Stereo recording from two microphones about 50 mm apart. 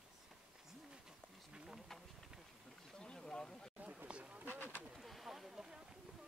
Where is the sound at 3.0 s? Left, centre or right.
Centre.